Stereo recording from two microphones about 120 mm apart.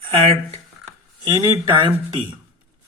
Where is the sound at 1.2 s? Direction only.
35° right (ahead or behind).